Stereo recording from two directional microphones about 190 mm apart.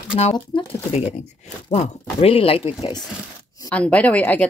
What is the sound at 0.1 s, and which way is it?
Speech, 25° left (ahead or behind).